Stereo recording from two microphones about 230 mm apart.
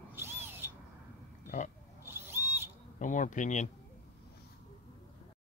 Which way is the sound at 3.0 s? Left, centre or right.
Left.